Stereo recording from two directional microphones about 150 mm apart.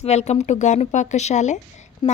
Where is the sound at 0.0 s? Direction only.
45° left (ahead or behind).